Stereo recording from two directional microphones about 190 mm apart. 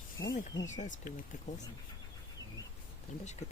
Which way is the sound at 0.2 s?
20° left (ahead or behind).